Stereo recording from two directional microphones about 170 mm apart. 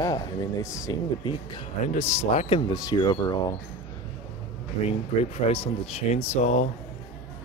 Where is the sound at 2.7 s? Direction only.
20° left (ahead or behind).